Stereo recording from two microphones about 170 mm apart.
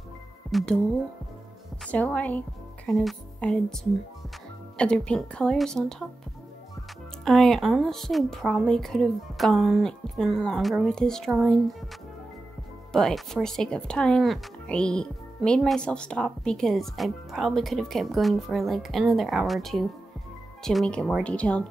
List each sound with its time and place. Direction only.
0.5 s speech: centre (ahead or behind)
1.9 s speech: 10° left (ahead or behind)
7.2 s speech: centre (ahead or behind)
12.9 s speech: 5° left (ahead or behind)